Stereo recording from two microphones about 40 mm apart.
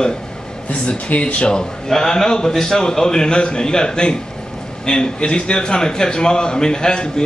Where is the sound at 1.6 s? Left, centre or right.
Centre.